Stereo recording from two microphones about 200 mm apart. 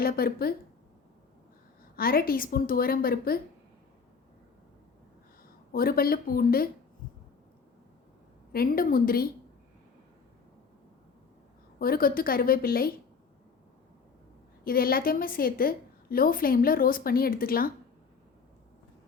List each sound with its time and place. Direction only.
0.0 s a woman's voice: 50° left (ahead or behind)
2.0 s a woman's voice: 45° left (ahead or behind)
5.7 s a woman's voice: 45° left (ahead or behind)
8.5 s a woman's voice: 45° left (ahead or behind)
11.8 s a woman's voice: 45° left (ahead or behind)
14.6 s a woman's voice: 45° left (ahead or behind)